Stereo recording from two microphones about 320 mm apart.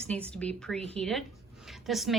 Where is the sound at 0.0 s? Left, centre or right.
Centre.